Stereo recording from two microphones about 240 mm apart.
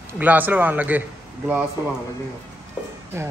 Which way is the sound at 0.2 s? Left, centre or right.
Centre.